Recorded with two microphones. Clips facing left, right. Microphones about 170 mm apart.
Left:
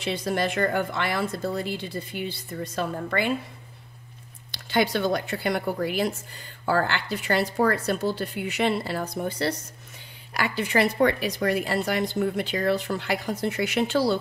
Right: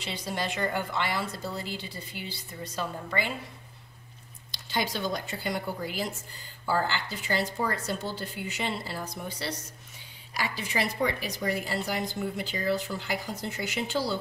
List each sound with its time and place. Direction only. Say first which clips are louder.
0.0 s a woman's voice: left 7 dB; 55° left (ahead or behind)
4.5 s a woman's voice: left 7 dB; 65° left (ahead or behind)